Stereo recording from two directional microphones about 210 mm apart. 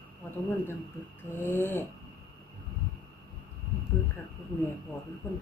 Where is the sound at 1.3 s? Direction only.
10° left (ahead or behind).